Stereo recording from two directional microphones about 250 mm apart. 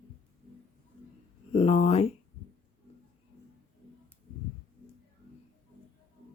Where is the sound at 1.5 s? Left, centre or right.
Left.